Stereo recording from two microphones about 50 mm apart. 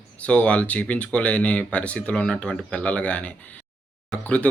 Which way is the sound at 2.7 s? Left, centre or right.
Left.